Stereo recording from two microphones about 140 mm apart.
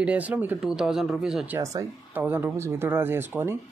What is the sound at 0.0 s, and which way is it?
Speech, 10° right (ahead or behind).